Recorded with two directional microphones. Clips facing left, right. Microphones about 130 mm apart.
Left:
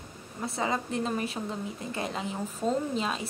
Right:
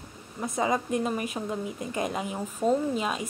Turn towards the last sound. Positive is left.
turn(degrees=-10)  # may be behind; listen again after turning